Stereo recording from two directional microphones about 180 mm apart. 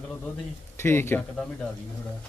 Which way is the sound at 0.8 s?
15° left (ahead or behind).